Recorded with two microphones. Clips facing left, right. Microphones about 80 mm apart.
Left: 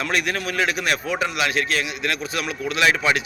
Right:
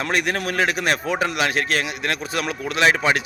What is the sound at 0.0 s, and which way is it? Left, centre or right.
A man's voice, right.